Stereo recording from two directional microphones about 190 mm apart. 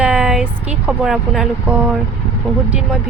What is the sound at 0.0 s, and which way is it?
Speech, 5° right (ahead or behind).